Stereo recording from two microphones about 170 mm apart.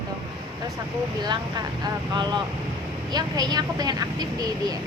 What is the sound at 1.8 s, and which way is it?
Speech, 25° right (ahead or behind).